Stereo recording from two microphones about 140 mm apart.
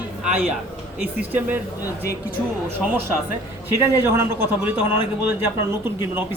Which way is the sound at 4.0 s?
15° right (ahead or behind).